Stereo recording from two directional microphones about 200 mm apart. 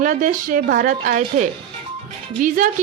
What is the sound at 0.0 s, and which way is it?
A woman's voice, 40° right (ahead or behind).